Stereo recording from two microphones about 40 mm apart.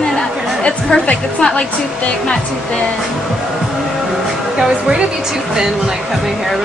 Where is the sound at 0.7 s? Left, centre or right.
Centre.